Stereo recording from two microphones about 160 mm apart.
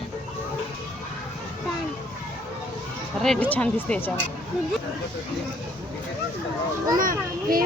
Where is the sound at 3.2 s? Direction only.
5° left (ahead or behind).